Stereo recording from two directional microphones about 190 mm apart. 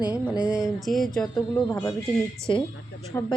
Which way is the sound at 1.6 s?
15° left (ahead or behind).